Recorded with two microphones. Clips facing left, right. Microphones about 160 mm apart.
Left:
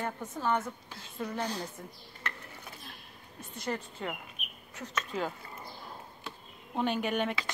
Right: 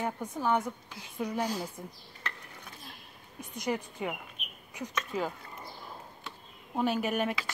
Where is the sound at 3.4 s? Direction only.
15° right (ahead or behind).